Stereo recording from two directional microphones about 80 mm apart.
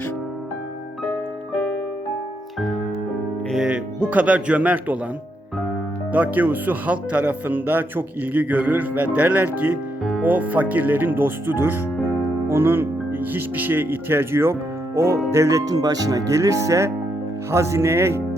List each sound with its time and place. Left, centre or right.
2.6 s music: centre
3.7 s speech: centre
6.1 s speech: right